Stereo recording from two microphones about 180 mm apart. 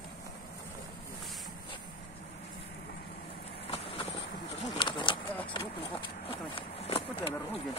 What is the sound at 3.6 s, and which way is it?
Vehicle, 30° left (ahead or behind).